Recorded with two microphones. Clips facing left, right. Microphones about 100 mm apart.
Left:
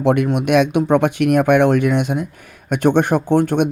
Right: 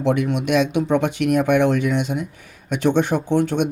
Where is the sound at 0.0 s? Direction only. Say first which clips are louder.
Left 4 dB; 55° left (ahead or behind).